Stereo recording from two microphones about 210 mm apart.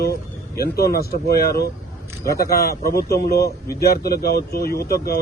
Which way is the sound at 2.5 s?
45° left (ahead or behind).